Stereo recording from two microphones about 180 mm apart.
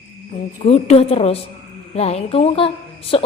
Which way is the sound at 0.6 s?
35° left (ahead or behind).